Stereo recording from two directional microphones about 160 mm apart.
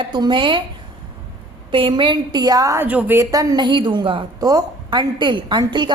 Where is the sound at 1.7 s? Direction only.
30° right (ahead or behind).